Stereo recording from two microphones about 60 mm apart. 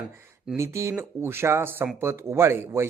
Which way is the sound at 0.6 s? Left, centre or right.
Right.